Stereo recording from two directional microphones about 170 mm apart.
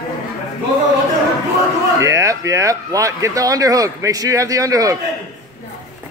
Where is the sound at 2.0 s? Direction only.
20° right (ahead or behind).